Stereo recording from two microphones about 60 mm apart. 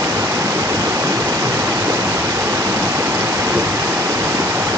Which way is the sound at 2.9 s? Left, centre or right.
Right.